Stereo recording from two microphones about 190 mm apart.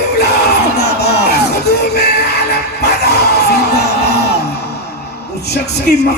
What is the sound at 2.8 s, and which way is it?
Music, 60° left (ahead or behind).